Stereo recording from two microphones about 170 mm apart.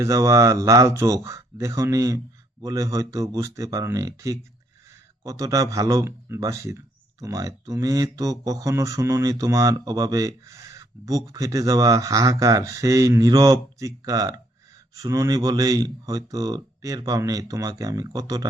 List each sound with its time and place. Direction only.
0.0 s speech: 20° right (ahead or behind)